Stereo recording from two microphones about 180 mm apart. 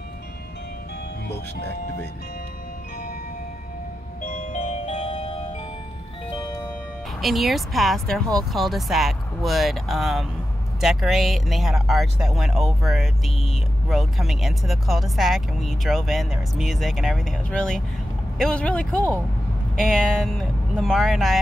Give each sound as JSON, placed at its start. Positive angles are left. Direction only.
{"t": 1.3, "sound": "speech", "side_deg": 70}
{"t": 4.2, "sound": "music", "side_deg": 45}
{"t": 7.2, "sound": "speech", "side_deg": 0}